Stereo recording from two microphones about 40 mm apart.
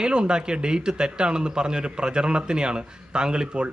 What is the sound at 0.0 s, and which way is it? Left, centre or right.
A man's voice, right.